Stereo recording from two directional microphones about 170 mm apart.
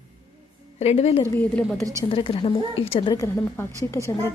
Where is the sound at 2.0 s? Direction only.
35° left (ahead or behind).